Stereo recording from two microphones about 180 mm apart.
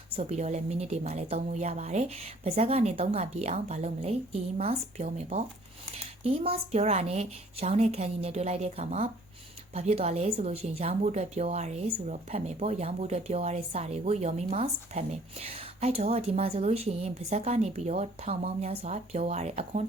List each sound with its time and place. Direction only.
0.1 s a woman's voice: 40° right (ahead or behind)